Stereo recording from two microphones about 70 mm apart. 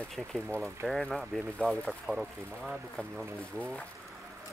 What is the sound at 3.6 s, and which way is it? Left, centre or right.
Speech, centre.